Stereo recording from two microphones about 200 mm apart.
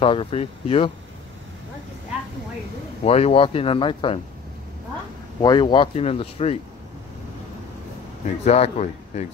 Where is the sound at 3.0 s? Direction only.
30° left (ahead or behind).